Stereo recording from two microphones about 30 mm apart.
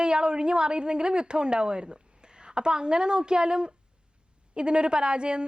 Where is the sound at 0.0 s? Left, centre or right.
Right.